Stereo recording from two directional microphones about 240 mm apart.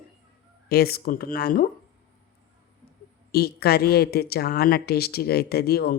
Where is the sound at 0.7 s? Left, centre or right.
Left.